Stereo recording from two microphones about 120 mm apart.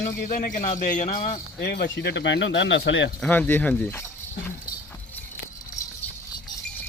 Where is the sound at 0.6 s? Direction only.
90° left.